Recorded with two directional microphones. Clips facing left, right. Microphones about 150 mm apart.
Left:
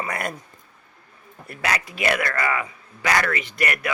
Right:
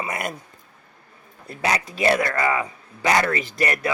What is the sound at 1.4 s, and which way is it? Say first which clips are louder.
Speech: right 2 dB; 20° right (ahead or behind).